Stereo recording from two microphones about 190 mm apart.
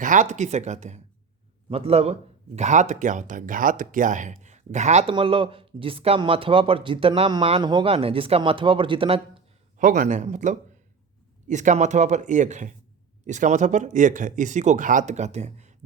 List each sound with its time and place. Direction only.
0.0 s speech: 40° right (ahead or behind)
9.7 s speech: 40° right (ahead or behind)